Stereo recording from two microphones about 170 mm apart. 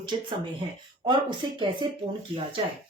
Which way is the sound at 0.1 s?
35° right (ahead or behind).